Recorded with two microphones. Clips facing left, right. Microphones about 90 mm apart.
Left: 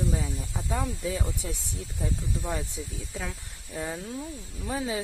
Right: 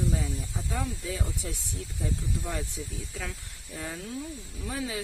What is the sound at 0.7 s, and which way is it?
Speech, 25° left (ahead or behind).